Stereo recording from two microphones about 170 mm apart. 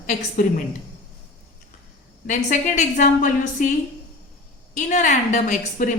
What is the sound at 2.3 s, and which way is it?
A woman's voice, 50° left (ahead or behind).